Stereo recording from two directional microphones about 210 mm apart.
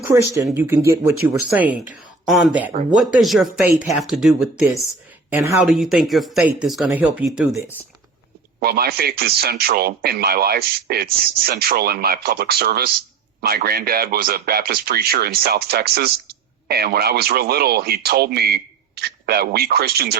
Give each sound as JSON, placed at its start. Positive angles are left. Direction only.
{"t": 0.0, "sound": "speech", "side_deg": -15}
{"t": 5.3, "sound": "speech", "side_deg": -10}
{"t": 5.6, "sound": "speech", "side_deg": 0}
{"t": 8.6, "sound": "speech", "side_deg": -45}